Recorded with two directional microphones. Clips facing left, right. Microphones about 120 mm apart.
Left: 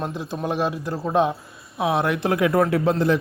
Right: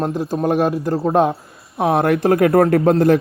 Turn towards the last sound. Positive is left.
turn(degrees=-50)  # may be behind; listen again after turning